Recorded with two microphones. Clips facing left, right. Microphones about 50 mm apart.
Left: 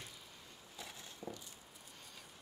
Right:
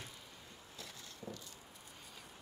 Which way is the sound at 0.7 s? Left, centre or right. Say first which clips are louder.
Left 2 dB; centre.